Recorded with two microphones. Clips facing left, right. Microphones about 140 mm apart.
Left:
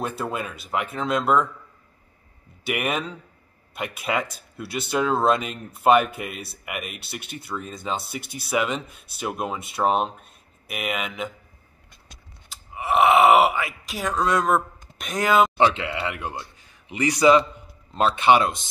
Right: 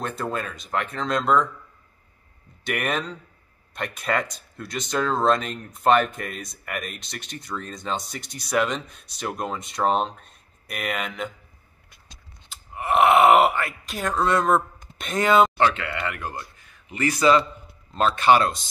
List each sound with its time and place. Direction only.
0.0 s speech: 5° left (ahead or behind)
2.6 s speech: 5° left (ahead or behind)
12.4 s groan: centre (ahead or behind)
15.7 s speech: 20° left (ahead or behind)